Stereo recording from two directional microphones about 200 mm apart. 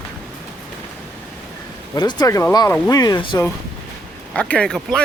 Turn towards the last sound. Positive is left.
turn(degrees=0)  # may be behind; listen again after turning